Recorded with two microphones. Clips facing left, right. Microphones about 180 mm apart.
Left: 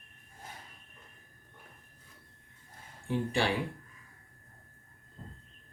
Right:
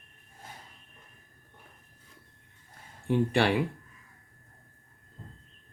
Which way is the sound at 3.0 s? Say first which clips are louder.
Right 5 dB; 65° right (ahead or behind).